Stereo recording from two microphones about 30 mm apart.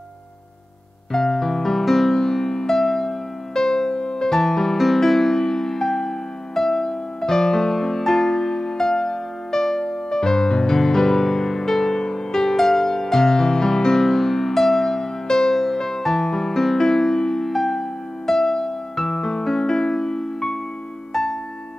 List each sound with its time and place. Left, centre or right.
1.1 s music: centre
2.0 s music: centre
4.3 s music: centre
9.5 s music: centre
10.7 s music: centre
15.0 s music: left